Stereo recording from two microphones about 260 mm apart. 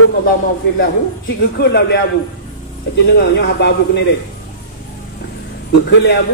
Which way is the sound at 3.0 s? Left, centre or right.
Left.